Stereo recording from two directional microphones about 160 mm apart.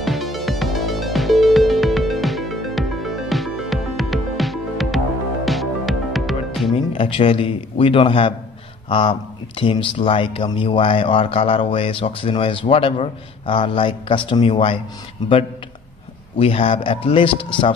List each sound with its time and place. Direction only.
0.0 s music: centre (ahead or behind)
6.9 s speech: 35° left (ahead or behind)
16.3 s speech: 35° left (ahead or behind)